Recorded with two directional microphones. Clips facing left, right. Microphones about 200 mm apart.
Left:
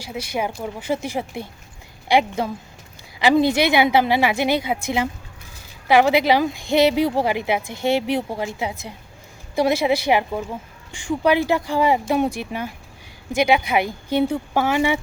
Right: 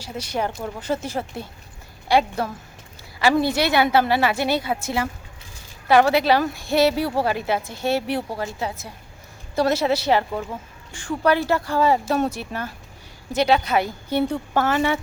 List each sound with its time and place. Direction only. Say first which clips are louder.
0.0 s a woman's voice: left 1 dB; 10° left (ahead or behind)